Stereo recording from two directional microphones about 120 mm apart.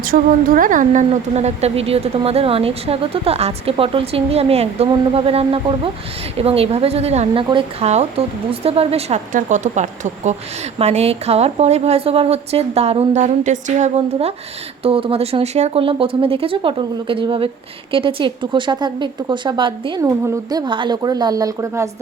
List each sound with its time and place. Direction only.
0.7 s speech: 90° right
10.8 s speech: 60° right (ahead or behind)
13.2 s a woman's voice: 90° right; by 20.0 s 40° right (ahead or behind)
20.0 s a woman's voice: 25° right (ahead or behind)